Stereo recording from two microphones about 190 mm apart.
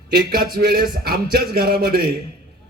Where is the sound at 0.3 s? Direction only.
55° right (ahead or behind).